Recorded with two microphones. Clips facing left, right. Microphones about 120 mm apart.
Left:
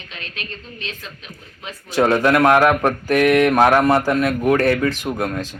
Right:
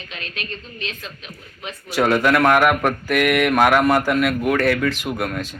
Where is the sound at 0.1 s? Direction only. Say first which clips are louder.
Right 1 dB; 30° left (ahead or behind).